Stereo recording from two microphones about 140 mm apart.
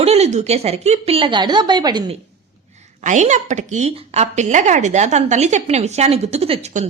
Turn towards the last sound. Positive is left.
turn(degrees=-45)  # may be behind; listen again after turning